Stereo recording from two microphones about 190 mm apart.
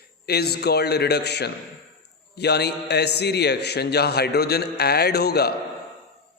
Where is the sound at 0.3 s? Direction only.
55° left (ahead or behind).